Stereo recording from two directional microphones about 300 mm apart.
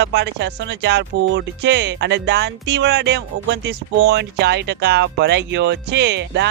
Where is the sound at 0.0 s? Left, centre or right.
Right.